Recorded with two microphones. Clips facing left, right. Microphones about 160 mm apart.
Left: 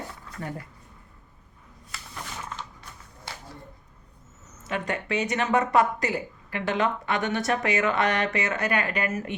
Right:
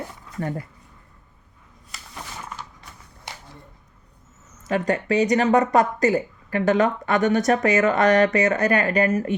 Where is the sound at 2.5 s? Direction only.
10° right (ahead or behind).